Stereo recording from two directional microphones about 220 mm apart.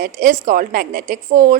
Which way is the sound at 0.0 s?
35° right (ahead or behind).